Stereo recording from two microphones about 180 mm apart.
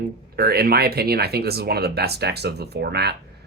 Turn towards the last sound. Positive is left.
turn(degrees=-65)  # may be behind; listen again after turning